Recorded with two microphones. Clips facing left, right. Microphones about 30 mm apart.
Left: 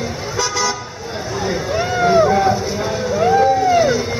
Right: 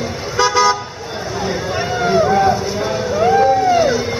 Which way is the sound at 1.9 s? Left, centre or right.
Centre.